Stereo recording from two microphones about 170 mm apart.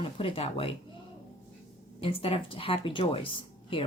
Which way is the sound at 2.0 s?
35° left (ahead or behind).